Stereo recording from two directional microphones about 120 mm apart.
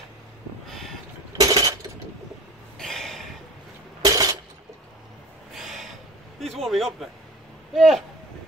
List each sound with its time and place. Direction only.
0.7 s boat: 5° left (ahead or behind)
1.4 s coin: 30° right (ahead or behind)
2.8 s a sound: 5° left (ahead or behind)
4.0 s a sound: 30° right (ahead or behind)
5.5 s snort: centre (ahead or behind)
6.4 s a man's voice: centre (ahead or behind)